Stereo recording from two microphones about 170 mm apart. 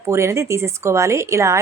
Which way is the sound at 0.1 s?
15° right (ahead or behind).